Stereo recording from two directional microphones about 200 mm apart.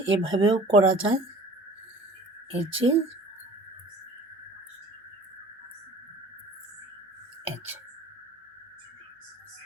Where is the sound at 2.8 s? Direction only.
30° right (ahead or behind).